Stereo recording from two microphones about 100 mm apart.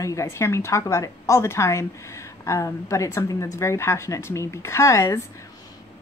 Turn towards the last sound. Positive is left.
turn(degrees=30)  # may be behind; listen again after turning